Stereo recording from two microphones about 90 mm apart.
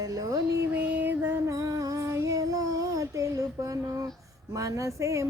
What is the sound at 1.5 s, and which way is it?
Child singing, 35° right (ahead or behind).